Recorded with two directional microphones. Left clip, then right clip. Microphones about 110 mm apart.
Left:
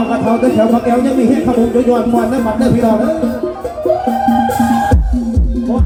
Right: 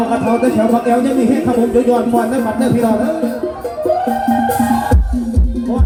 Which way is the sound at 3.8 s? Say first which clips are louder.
Left 2 dB; 25° right (ahead or behind).